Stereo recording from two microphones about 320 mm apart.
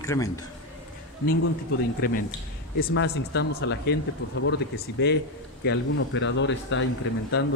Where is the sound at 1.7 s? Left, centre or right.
Left.